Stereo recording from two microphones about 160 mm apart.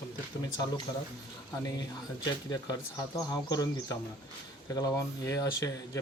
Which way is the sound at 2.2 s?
25° left (ahead or behind).